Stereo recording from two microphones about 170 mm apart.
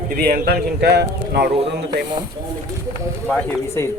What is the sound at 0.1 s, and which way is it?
A man's voice, 65° right (ahead or behind).